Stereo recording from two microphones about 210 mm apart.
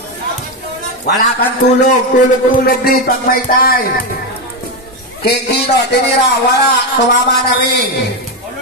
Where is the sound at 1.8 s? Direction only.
35° left (ahead or behind).